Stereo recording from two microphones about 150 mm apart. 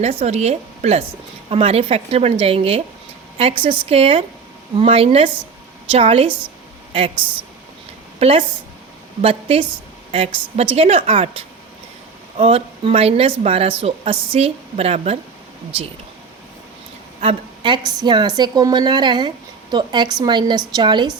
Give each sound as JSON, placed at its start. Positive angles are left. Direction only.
{"t": 0.0, "sound": "a woman's voice", "side_deg": -45}
{"t": 8.2, "sound": "a woman's voice", "side_deg": -40}
{"t": 17.2, "sound": "a woman's voice", "side_deg": -35}